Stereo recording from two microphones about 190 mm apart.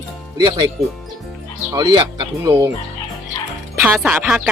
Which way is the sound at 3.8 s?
5° right (ahead or behind).